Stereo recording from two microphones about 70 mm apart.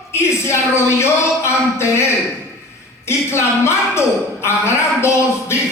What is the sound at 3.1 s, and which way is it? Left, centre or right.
Speech, left.